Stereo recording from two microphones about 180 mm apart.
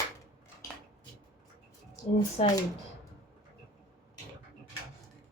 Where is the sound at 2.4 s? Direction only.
35° left (ahead or behind).